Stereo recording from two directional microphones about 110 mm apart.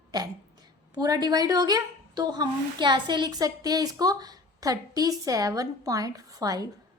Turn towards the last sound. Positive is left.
turn(degrees=-35)  # may be behind; listen again after turning